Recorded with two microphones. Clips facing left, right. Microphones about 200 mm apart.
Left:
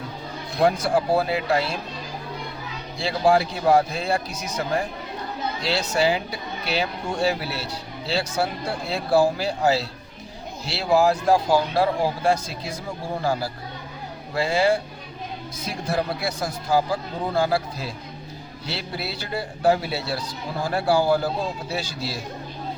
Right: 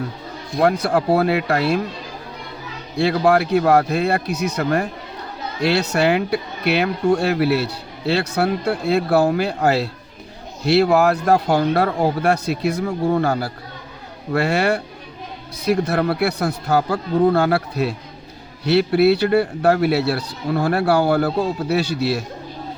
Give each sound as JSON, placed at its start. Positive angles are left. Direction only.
{"t": 0.6, "sound": "speech", "side_deg": -65}
{"t": 3.0, "sound": "speech", "side_deg": -65}